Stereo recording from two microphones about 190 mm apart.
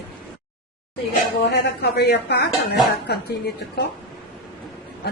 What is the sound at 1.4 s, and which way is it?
A woman's voice, 60° left (ahead or behind).